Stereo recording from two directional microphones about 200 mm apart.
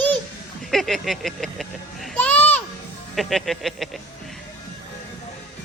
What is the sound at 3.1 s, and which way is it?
Speech, centre (ahead or behind).